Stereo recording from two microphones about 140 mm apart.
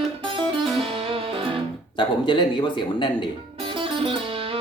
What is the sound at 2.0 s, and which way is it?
Speech, 35° left (ahead or behind).